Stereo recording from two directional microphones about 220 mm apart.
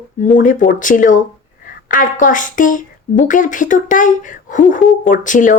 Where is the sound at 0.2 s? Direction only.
35° left (ahead or behind).